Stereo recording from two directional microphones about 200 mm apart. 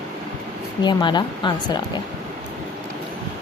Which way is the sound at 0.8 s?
20° left (ahead or behind).